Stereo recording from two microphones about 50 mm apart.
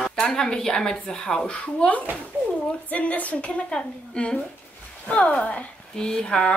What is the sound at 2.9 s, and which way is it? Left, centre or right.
Speech, left.